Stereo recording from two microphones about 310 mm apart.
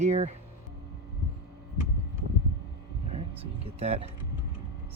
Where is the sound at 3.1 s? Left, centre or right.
Centre.